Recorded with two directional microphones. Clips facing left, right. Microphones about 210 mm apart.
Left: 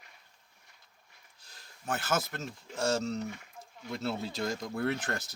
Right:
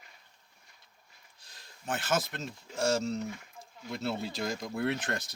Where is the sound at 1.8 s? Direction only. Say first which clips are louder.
Right 1 dB; 20° right (ahead or behind).